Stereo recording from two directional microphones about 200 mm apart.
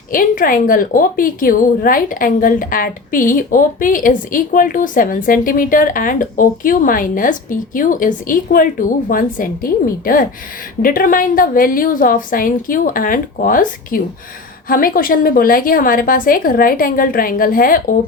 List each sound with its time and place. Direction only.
0.1 s a woman's voice: 45° left (ahead or behind)